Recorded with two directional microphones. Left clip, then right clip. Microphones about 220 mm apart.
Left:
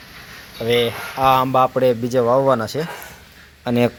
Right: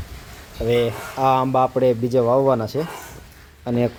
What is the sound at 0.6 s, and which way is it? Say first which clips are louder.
Speech: left 2 dB; 5° right (ahead or behind).